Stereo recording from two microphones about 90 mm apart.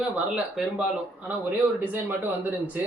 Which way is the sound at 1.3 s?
20° right (ahead or behind).